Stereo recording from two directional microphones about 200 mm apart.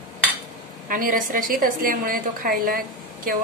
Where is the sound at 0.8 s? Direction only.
45° right (ahead or behind).